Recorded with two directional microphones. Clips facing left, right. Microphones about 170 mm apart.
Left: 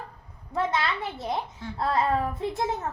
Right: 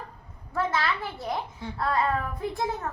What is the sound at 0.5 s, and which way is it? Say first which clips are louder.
Speech: even; 20° left (ahead or behind).